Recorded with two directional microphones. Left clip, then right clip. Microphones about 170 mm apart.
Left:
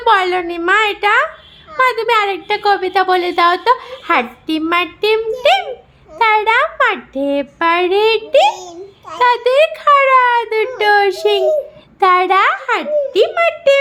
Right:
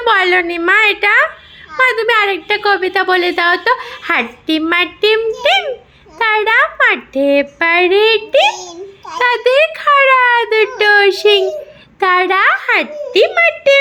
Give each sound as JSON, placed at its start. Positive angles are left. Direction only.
{"t": 0.0, "sound": "a woman's voice", "side_deg": 0}
{"t": 8.5, "sound": "babbling", "side_deg": 20}
{"t": 9.1, "sound": "a woman's voice", "side_deg": 5}